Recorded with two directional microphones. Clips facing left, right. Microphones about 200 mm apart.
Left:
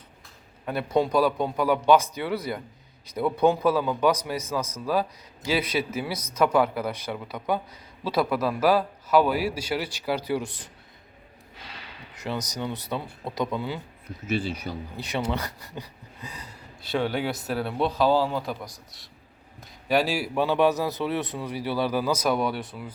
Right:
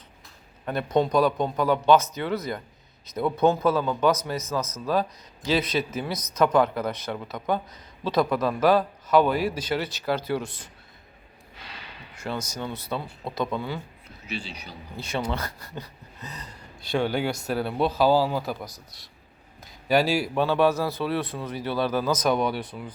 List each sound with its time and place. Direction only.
0.6 s a man's voice: 5° left (ahead or behind)
12.2 s a man's voice: 15° left (ahead or behind)
14.3 s speech: 50° left (ahead or behind)
14.9 s a man's voice: 15° left (ahead or behind)